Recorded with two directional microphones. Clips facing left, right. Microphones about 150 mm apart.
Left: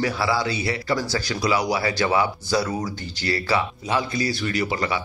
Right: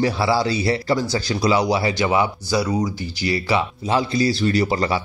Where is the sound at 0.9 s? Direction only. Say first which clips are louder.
Right 4 dB; 20° right (ahead or behind).